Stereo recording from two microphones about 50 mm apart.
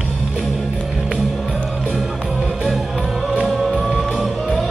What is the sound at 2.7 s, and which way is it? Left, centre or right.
Music, centre.